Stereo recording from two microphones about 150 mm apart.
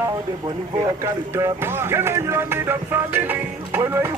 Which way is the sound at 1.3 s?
15° right (ahead or behind).